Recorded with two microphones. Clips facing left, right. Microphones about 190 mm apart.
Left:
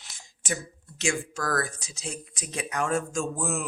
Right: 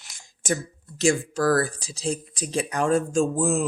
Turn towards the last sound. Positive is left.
turn(degrees=-30)  # may be behind; listen again after turning